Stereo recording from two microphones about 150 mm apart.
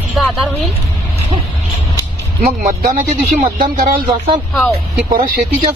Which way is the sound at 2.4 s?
55° right (ahead or behind).